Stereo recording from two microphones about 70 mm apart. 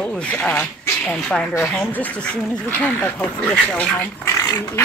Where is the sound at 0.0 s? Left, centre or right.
Centre.